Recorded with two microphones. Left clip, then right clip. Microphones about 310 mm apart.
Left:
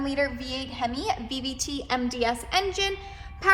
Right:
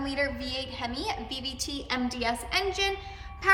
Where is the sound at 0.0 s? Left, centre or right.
Centre.